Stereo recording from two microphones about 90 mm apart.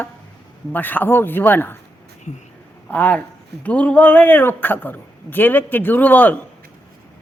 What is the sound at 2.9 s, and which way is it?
A man's voice, 15° left (ahead or behind).